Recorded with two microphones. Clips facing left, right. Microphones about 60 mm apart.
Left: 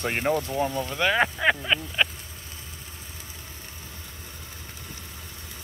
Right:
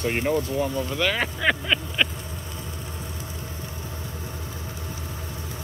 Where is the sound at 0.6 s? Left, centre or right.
Left.